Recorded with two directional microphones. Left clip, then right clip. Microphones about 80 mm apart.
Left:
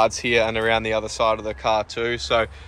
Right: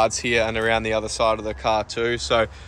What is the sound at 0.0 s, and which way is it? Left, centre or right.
Speech, centre.